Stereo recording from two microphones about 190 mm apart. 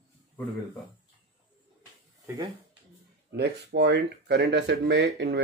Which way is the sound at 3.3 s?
60° right (ahead or behind).